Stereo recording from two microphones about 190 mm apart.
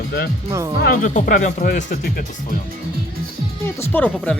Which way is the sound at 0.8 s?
45° left (ahead or behind).